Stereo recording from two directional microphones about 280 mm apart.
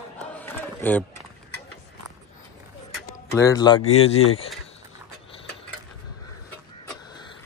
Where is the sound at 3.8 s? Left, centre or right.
Left.